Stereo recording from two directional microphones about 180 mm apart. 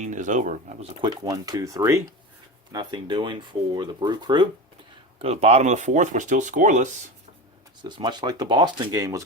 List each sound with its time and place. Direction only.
0.0 s speech: 45° right (ahead or behind)
1.0 s speech: 20° right (ahead or behind)
5.2 s speech: 35° right (ahead or behind)
7.9 s speech: 25° right (ahead or behind)